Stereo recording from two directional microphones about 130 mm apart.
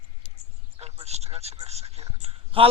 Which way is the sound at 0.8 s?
55° right (ahead or behind).